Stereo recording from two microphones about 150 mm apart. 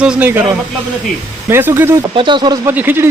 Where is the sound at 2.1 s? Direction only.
35° right (ahead or behind).